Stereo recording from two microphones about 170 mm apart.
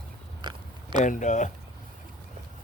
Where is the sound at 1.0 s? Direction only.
45° left (ahead or behind).